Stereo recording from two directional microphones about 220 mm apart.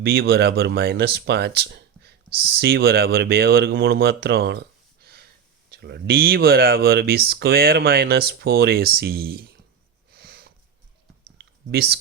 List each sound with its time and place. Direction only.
0.0 s speech: 45° right (ahead or behind)
10.1 s sniff: 45° right (ahead or behind)
11.3 s clicking: 45° right (ahead or behind)